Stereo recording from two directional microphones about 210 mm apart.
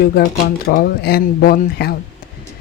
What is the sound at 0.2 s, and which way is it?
Speech, 50° left (ahead or behind).